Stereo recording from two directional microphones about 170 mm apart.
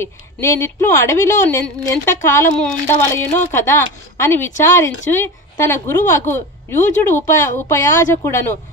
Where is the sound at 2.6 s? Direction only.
15° left (ahead or behind).